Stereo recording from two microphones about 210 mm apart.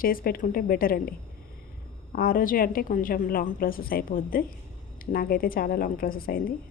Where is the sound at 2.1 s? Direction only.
45° left (ahead or behind).